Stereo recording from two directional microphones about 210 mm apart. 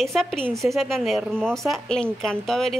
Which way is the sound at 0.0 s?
Centre (ahead or behind).